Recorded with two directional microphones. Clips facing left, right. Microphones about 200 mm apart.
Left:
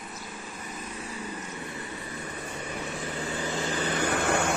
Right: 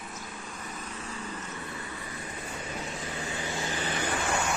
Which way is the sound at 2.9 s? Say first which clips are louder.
Left 3 dB; 35° left (ahead or behind).